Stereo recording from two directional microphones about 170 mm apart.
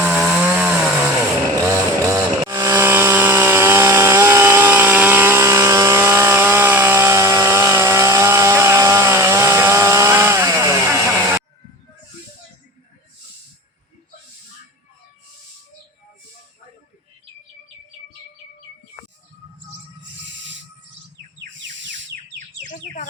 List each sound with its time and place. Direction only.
0.0 s chainsaw: 10° right (ahead or behind)
20.3 s owl: 90° right
21.5 s a sound: 90° right